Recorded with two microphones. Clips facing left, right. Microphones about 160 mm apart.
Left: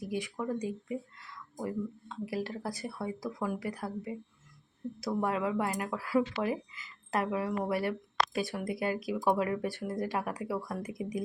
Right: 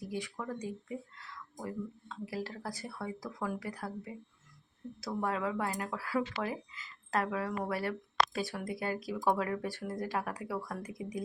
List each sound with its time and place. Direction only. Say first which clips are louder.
0.0 s speech: left 4 dB; 15° left (ahead or behind)